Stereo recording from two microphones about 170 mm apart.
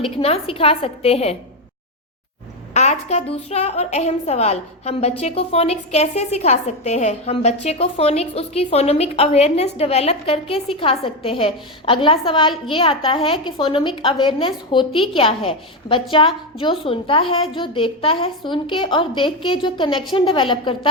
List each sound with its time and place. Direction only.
0.0 s a woman's voice: 35° left (ahead or behind)
2.7 s a woman's voice: 40° left (ahead or behind)